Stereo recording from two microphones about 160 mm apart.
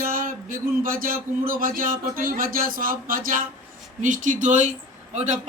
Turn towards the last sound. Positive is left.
turn(degrees=-45)  # may be behind; listen again after turning